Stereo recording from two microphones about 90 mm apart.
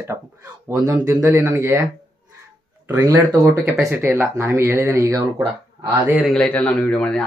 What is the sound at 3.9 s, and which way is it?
Speech, 25° right (ahead or behind).